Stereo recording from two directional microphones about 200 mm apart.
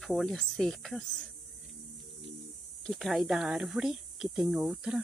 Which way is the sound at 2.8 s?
Centre (ahead or behind).